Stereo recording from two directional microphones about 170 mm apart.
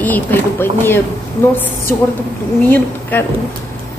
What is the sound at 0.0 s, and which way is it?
A woman's voice, 10° left (ahead or behind).